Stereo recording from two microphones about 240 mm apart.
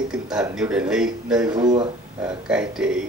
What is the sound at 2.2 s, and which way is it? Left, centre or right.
Speech, centre.